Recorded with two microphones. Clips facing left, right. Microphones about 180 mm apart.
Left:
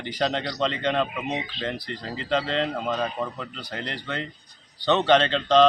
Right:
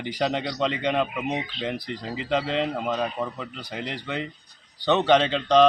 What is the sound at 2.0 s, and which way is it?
A man's voice, 5° right (ahead or behind).